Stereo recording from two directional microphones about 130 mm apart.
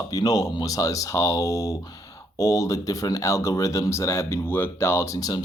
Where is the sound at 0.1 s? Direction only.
30° left (ahead or behind).